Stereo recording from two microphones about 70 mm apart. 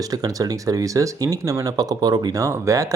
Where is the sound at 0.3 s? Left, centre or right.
Right.